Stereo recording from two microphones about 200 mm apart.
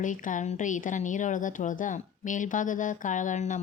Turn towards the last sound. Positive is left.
turn(degrees=40)  # may be behind; listen again after turning